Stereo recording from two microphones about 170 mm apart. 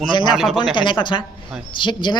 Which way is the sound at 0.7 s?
30° left (ahead or behind).